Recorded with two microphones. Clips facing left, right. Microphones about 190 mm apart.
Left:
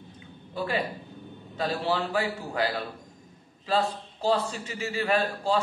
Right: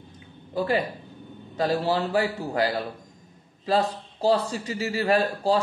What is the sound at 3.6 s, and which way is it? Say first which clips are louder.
A man's voice: right 3 dB; 35° right (ahead or behind).